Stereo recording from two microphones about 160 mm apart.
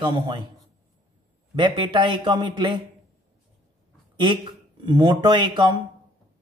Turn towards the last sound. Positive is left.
turn(degrees=-30)  # may be behind; listen again after turning